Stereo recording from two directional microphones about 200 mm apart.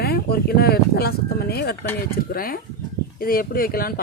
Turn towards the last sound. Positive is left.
turn(degrees=45)  # may be behind; listen again after turning